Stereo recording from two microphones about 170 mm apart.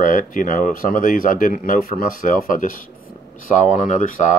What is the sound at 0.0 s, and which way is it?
Speech, 50° left (ahead or behind).